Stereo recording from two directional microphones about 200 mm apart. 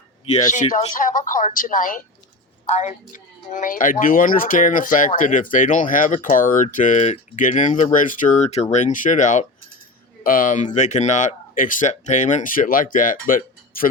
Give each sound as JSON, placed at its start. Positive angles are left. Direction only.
{"t": 0.5, "sound": "speech", "side_deg": 40}